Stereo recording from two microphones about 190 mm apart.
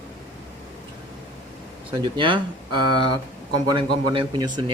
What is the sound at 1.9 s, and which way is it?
Speech, 25° right (ahead or behind).